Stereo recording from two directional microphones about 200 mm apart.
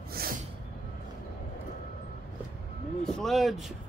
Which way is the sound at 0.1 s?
45° right (ahead or behind).